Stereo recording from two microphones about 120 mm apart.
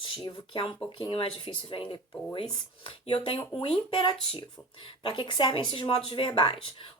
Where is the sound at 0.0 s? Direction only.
45° left (ahead or behind).